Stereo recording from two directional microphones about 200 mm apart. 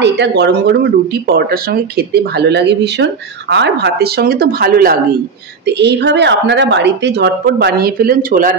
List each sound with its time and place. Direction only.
0.0 s speech: 60° right (ahead or behind)
5.8 s a woman's voice: 55° right (ahead or behind)